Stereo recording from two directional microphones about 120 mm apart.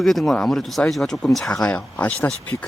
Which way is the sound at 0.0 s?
Centre (ahead or behind).